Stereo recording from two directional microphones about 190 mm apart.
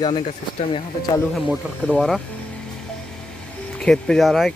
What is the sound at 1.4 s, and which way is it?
Speech, 5° right (ahead or behind).